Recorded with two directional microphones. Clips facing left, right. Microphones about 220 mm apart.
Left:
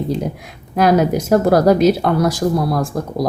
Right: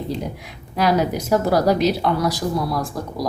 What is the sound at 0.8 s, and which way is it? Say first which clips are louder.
A woman's voice: left 5 dB; 50° left (ahead or behind).